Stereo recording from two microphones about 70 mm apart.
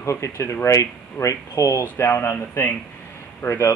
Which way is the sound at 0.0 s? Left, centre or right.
Left.